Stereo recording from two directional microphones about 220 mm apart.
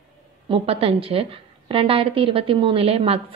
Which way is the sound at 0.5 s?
25° right (ahead or behind).